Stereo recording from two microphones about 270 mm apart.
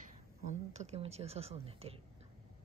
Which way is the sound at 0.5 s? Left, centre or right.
Right.